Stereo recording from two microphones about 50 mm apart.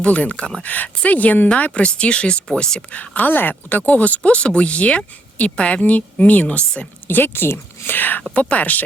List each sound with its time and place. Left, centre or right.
0.0 s a woman's voice: left; by 2.8 s centre
3.2 s speech: left
7.1 s speech: left
8.3 s speech: left